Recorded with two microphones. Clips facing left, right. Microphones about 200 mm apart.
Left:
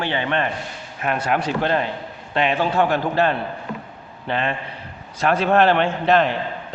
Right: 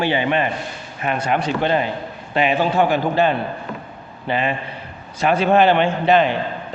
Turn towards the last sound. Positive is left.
turn(degrees=0)  # may be behind; listen again after turning